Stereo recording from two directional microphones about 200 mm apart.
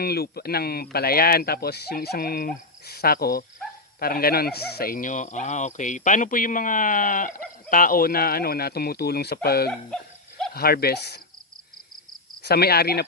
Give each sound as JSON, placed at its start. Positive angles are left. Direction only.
{"t": 0.0, "sound": "speech", "side_deg": 50}
{"t": 9.6, "sound": "dog", "side_deg": 5}
{"t": 10.5, "sound": "speech", "side_deg": 50}
{"t": 12.4, "sound": "speech", "side_deg": 55}